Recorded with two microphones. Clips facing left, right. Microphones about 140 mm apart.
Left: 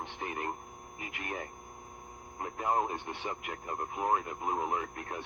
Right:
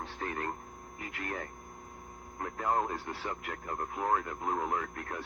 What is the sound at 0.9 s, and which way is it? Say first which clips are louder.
Speech: right 1 dB; 20° left (ahead or behind).